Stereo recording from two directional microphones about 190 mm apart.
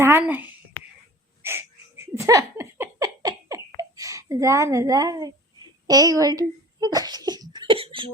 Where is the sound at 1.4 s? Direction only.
15° right (ahead or behind).